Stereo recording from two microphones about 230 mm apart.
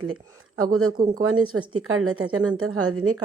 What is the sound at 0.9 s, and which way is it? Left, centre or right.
Speech, centre.